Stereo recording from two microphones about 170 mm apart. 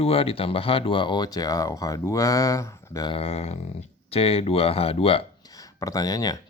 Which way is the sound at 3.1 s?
35° left (ahead or behind).